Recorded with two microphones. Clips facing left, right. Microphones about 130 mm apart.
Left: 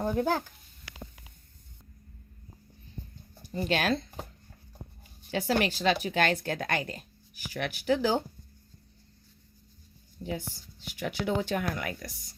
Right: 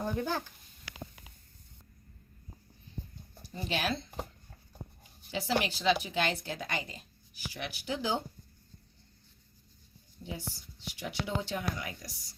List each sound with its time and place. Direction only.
0.0 s speech: 50° left (ahead or behind)
3.5 s speech: 60° left (ahead or behind)
5.3 s speech: 55° left (ahead or behind)
10.2 s speech: 55° left (ahead or behind)